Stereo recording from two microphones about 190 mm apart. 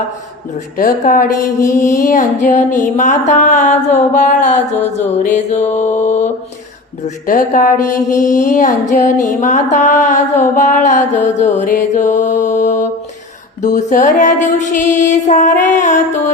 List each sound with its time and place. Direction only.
0.8 s a woman's voice: 45° left (ahead or behind)
1.4 s mantra: 15° left (ahead or behind)
1.7 s mantra: 40° left (ahead or behind)
7.9 s mantra: 15° left (ahead or behind)
8.4 s mantra: 40° left (ahead or behind)
11.6 s music: 40° left (ahead or behind)
13.6 s mantra: 40° left (ahead or behind)